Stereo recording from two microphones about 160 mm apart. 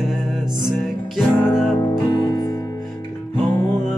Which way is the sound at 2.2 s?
25° left (ahead or behind).